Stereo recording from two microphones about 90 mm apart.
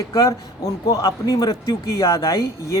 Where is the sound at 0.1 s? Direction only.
40° left (ahead or behind).